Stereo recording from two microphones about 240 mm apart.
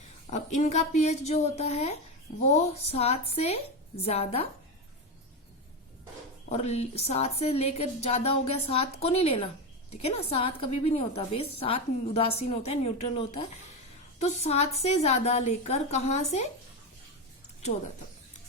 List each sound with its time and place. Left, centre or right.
0.3 s a woman's voice: left
6.5 s a woman's voice: left